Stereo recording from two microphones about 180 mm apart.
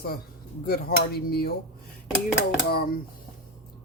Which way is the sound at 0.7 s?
55° left (ahead or behind).